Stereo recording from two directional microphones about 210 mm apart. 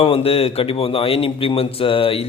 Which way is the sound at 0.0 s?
25° left (ahead or behind).